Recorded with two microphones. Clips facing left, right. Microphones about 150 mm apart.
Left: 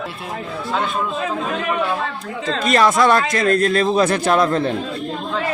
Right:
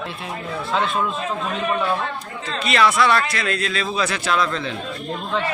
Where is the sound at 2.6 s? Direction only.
45° left (ahead or behind).